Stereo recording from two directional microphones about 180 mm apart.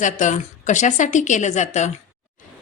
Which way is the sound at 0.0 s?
45° left (ahead or behind).